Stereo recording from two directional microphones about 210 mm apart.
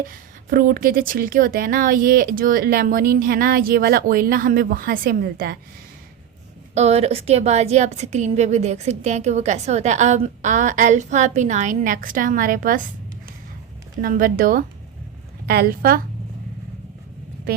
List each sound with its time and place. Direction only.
0.0 s a woman's voice: 45° right (ahead or behind)
6.7 s a woman's voice: 30° right (ahead or behind)
14.0 s a woman's voice: 40° right (ahead or behind)